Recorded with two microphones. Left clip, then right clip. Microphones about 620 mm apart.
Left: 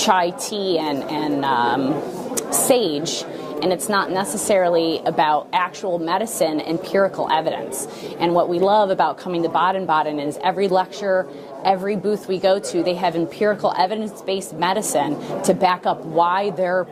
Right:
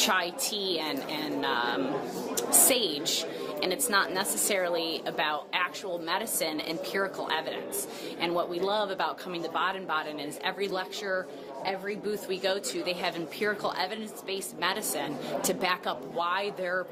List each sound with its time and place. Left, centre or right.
0.0 s a woman's voice: left